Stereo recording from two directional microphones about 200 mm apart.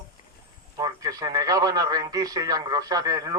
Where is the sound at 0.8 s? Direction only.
20° right (ahead or behind).